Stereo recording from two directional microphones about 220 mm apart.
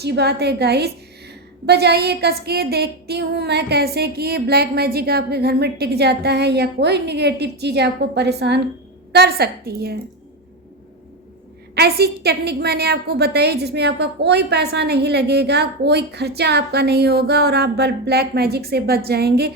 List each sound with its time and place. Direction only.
0.0 s a woman's voice: 50° right (ahead or behind)
11.7 s a woman's voice: 45° right (ahead or behind)